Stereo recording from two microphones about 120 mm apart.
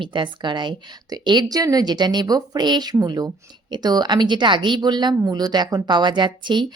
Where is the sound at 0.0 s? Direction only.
40° right (ahead or behind).